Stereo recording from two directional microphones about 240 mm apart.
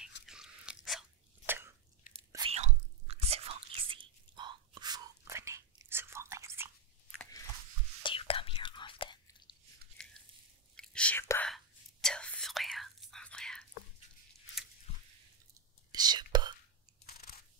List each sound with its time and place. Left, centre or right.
0.3 s a sound: centre
2.3 s whispering: right
7.2 s chewing: centre
8.0 s whispering: left
10.0 s biting: centre
10.8 s whispering: centre
15.9 s whispering: centre